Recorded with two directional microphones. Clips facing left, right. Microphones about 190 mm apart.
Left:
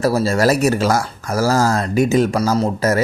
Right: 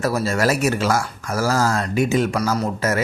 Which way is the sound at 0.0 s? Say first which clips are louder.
Left 4 dB; 35° left (ahead or behind).